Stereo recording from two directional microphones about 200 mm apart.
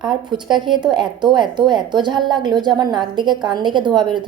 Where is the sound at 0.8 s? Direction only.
5° right (ahead or behind).